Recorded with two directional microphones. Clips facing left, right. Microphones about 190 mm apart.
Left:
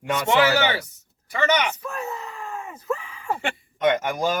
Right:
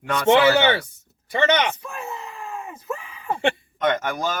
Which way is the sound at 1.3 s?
30° right (ahead or behind).